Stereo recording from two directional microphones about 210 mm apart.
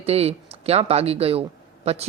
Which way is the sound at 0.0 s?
30° right (ahead or behind).